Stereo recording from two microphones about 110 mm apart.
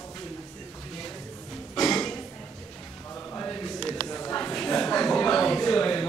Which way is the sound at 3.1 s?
20° left (ahead or behind).